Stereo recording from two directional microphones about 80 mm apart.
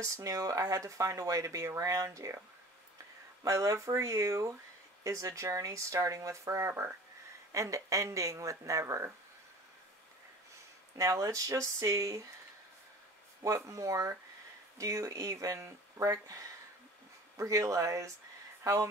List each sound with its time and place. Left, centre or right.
0.0 s speech: right
3.4 s speech: right
11.0 s speech: right
13.7 s speech: right
17.4 s speech: right